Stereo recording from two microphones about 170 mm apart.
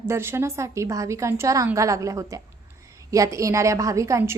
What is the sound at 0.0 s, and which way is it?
A woman's voice, 15° right (ahead or behind).